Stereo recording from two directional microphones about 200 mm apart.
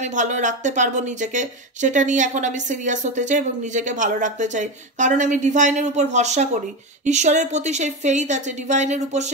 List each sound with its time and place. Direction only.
0.0 s speech: 35° right (ahead or behind)